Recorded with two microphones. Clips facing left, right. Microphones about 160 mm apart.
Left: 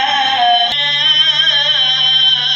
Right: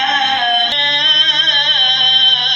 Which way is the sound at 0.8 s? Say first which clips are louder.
Right 3 dB; 65° right (ahead or behind).